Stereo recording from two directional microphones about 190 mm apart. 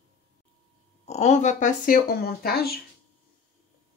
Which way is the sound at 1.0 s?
35° left (ahead or behind).